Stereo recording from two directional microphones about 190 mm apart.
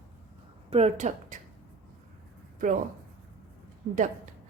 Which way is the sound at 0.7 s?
35° right (ahead or behind).